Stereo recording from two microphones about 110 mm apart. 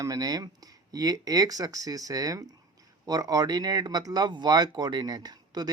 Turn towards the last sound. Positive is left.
turn(degrees=-35)  # may be behind; listen again after turning